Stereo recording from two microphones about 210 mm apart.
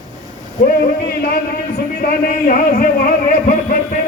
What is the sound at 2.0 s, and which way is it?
Speech, 40° left (ahead or behind).